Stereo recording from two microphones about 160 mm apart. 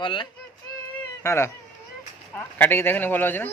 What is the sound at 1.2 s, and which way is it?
A man's voice, 15° left (ahead or behind).